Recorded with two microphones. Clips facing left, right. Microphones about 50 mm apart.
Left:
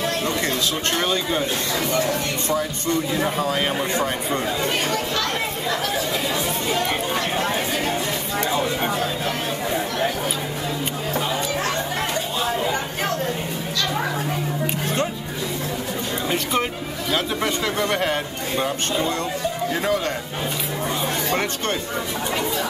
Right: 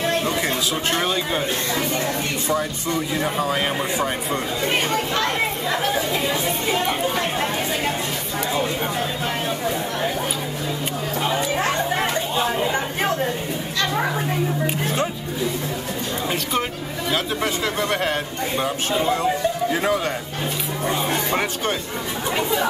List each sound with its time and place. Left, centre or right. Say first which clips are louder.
0.9 s speech: left 1 dB; centre
2.4 s a man's voice: right 1 dB; centre
4.9 s speech: right 2 dB; right
6.7 s a sound: right 1 dB; centre
11.2 s chatter: right 6 dB; centre
17.1 s a man's voice: even; centre
21.1 s speech: right 1 dB; centre